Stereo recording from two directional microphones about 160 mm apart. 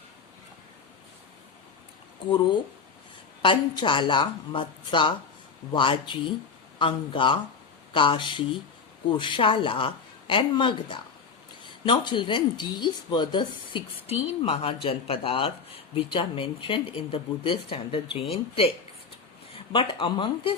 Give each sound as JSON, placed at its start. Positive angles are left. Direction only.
{"t": 3.4, "sound": "speech", "side_deg": 30}
{"t": 19.7, "sound": "speech", "side_deg": 30}